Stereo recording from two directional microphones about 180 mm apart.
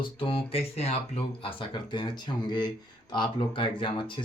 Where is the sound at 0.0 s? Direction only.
30° left (ahead or behind).